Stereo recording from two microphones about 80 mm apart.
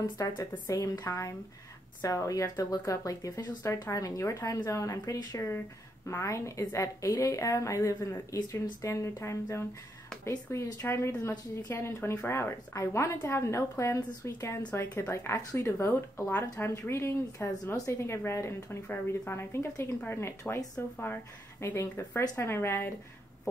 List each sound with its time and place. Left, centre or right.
0.2 s a woman's voice: left
11.7 s a woman's voice: left
15.8 s a woman's voice: left